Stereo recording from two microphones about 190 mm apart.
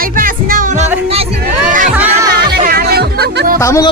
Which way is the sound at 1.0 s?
30° right (ahead or behind).